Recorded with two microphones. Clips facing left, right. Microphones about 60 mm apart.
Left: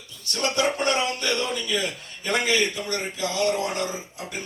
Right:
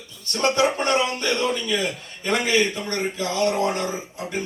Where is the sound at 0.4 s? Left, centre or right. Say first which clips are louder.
Right 3 dB; right.